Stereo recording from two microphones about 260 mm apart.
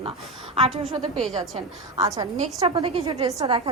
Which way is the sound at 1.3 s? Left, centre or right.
Centre.